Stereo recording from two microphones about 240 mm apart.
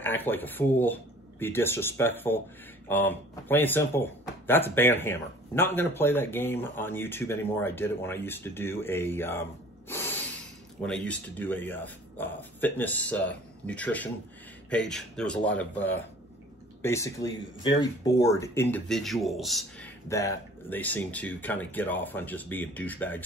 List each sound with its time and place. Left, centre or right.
0.0 s a man's voice: centre
20.1 s a man's voice: centre